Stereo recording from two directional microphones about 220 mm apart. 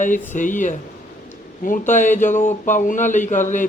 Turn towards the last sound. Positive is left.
turn(degrees=35)  # may be behind; listen again after turning